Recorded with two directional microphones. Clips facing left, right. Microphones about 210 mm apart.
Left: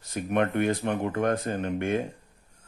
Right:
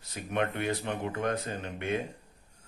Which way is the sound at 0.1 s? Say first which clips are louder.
Left 6 dB; 50° left (ahead or behind).